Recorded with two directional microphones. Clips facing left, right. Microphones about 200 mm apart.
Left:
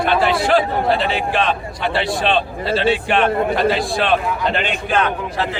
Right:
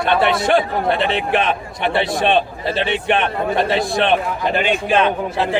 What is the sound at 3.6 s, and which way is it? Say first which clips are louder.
Speech: even; 25° right (ahead or behind).